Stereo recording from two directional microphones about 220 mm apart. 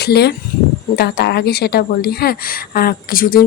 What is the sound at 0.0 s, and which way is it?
A woman's voice, 45° left (ahead or behind).